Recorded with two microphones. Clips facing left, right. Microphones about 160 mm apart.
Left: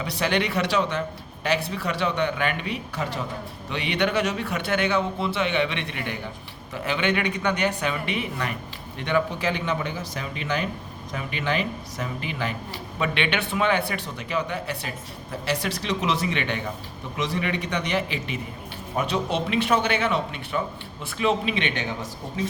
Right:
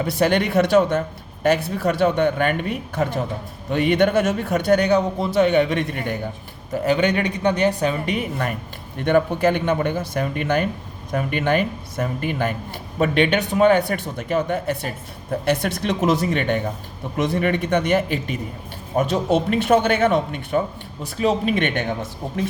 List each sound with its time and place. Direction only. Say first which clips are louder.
0.0 s a man's voice: right 6 dB; 50° right (ahead or behind)